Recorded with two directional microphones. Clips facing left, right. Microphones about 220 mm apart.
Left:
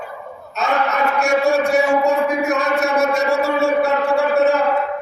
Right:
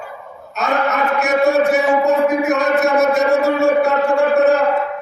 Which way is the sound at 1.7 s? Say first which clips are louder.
Right 1 dB; centre (ahead or behind).